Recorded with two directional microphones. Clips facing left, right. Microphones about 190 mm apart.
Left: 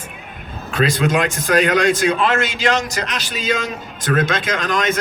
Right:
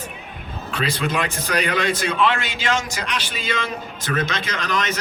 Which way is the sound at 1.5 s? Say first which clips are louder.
Left 7 dB; 45° left (ahead or behind).